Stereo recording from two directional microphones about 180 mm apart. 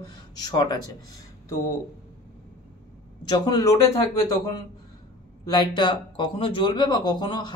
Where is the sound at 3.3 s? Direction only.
25° left (ahead or behind).